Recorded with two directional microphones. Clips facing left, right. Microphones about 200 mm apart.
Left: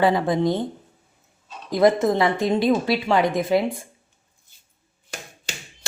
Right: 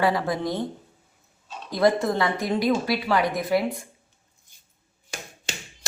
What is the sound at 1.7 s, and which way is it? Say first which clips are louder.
A woman's voice: left 4 dB; 20° left (ahead or behind).